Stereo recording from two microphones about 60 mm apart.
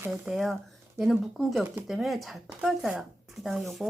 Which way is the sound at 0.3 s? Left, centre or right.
Centre.